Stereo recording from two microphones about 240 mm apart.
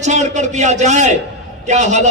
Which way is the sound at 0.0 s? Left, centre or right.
Right.